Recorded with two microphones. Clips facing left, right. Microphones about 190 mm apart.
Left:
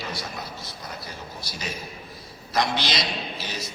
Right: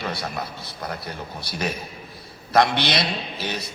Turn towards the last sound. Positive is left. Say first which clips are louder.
# right 3 dB
turn(degrees=-60)  # may be behind; listen again after turning